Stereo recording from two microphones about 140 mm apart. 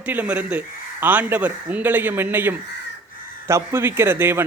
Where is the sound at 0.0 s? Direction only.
10° right (ahead or behind).